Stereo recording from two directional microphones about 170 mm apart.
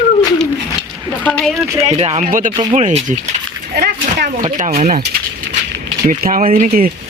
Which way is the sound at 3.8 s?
70° right (ahead or behind).